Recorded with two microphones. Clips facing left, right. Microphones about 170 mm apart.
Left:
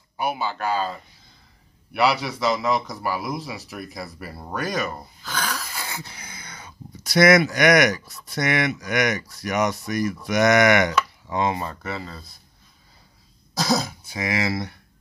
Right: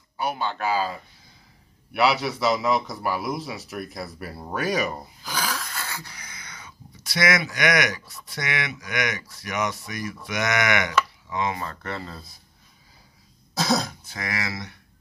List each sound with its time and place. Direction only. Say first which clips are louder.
0.2 s a man's voice: left 1 dB; 10° left (ahead or behind)
2.0 s a man's voice: even; centre (ahead or behind)
5.6 s speech: left 1 dB; 10° left (ahead or behind); by 11.6 s 35° left (ahead or behind)
11.6 s speech: left 2 dB; 10° left (ahead or behind)
13.6 s a man's voice: left 1 dB; centre (ahead or behind)
14.0 s speech: left 6 dB; 15° left (ahead or behind)